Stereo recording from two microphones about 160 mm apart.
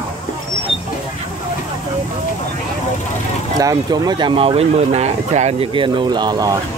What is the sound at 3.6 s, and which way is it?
Speech, 20° right (ahead or behind).